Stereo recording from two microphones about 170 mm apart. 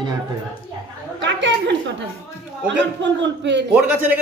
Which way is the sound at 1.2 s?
90° right.